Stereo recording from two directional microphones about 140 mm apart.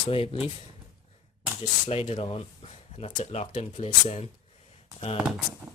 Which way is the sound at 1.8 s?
45° left (ahead or behind).